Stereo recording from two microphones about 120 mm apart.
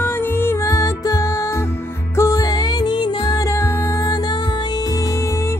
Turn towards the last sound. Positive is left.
turn(degrees=25)  # may be behind; listen again after turning